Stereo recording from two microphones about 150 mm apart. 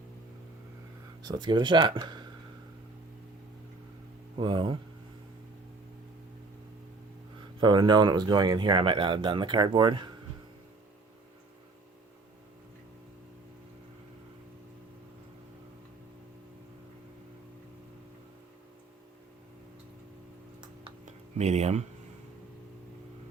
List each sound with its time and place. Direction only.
1.2 s speech: 30° right (ahead or behind)
4.4 s speech: 35° right (ahead or behind)
7.6 s speech: 30° right (ahead or behind)
21.0 s a sound: 50° right (ahead or behind)